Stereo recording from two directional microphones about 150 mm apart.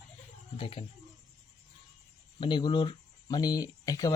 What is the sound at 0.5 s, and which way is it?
Speech, 35° left (ahead or behind).